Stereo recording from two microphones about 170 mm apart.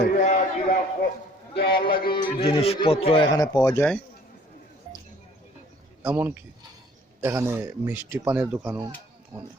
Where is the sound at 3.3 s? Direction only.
20° left (ahead or behind).